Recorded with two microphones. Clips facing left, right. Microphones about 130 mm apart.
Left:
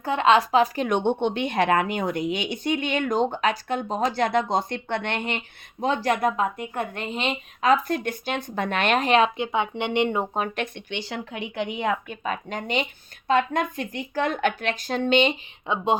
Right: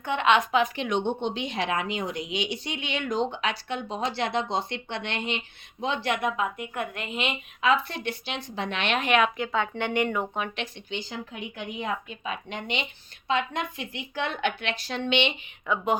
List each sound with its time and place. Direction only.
0.0 s a woman's voice: 35° left (ahead or behind)
0.9 s a woman's voice: 60° left (ahead or behind)
12.2 s a woman's voice: 45° left (ahead or behind)
15.6 s speech: 25° left (ahead or behind)